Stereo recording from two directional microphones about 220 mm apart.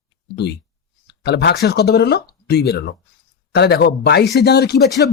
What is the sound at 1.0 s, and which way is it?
Speech, 50° left (ahead or behind).